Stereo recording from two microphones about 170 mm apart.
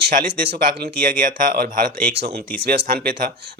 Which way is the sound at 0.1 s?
60° right (ahead or behind).